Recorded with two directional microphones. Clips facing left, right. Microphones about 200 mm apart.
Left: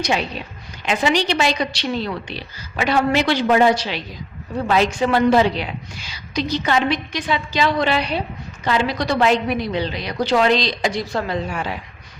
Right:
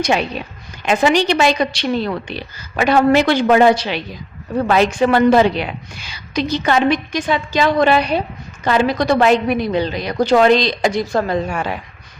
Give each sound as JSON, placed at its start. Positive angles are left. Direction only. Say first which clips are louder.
{"t": 0.1, "sound": "a woman's voice", "louder": "right 4 dB", "side_deg": -60}